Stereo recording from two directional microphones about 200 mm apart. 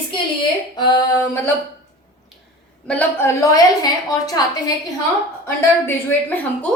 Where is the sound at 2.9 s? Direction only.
5° left (ahead or behind).